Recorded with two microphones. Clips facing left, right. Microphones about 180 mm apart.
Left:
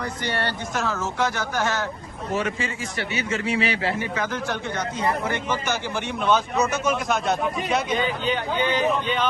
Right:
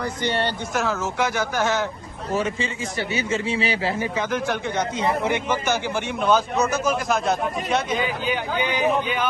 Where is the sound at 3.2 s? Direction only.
25° right (ahead or behind).